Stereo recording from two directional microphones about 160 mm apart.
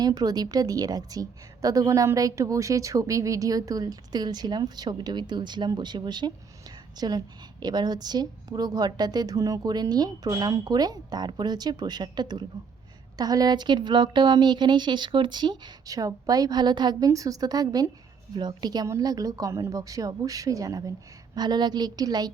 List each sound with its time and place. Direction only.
0.0 s a woman's voice: 25° right (ahead or behind)